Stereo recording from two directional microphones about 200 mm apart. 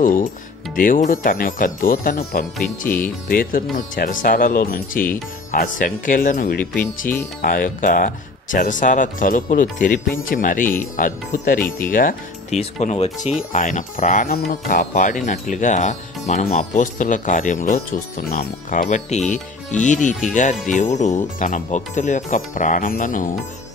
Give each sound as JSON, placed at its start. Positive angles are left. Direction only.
{"t": 0.0, "sound": "speech", "side_deg": 40}
{"t": 12.7, "sound": "speech", "side_deg": 30}